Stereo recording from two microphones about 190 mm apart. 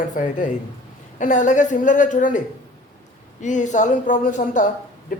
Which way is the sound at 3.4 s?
40° left (ahead or behind).